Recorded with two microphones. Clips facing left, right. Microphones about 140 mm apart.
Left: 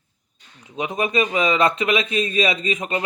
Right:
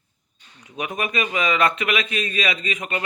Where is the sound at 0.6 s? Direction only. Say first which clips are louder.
Left 3 dB; 25° left (ahead or behind).